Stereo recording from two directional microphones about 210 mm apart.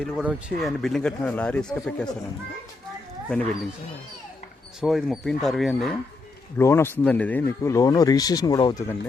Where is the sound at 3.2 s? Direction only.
Centre (ahead or behind).